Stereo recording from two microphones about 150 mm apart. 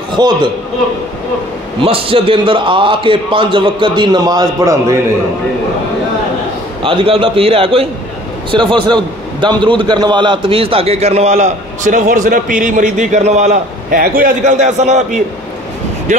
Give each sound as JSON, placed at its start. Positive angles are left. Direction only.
{"t": 0.2, "sound": "a man's voice", "side_deg": -30}
{"t": 1.8, "sound": "a man's voice", "side_deg": -40}
{"t": 6.8, "sound": "a man's voice", "side_deg": -35}
{"t": 13.8, "sound": "a man's voice", "side_deg": -70}
{"t": 14.8, "sound": "a man's voice", "side_deg": -50}
{"t": 16.1, "sound": "speech", "side_deg": -55}